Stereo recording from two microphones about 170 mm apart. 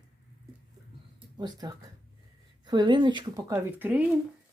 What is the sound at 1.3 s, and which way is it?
Speech, 25° right (ahead or behind).